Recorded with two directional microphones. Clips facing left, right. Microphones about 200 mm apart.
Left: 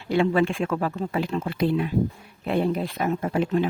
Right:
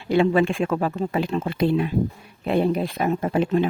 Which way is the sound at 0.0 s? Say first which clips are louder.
Right 3 dB; 20° right (ahead or behind).